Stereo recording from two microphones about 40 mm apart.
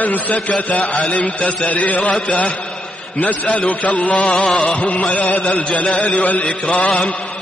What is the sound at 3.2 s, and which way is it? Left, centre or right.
Mantra, left.